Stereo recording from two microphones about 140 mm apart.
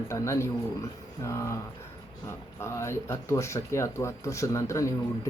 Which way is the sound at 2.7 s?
20° left (ahead or behind).